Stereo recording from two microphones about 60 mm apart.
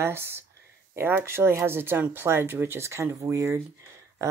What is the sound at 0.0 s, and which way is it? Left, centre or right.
Speech, right.